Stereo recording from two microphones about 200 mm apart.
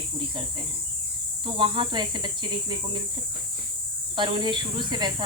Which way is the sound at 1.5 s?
25° right (ahead or behind).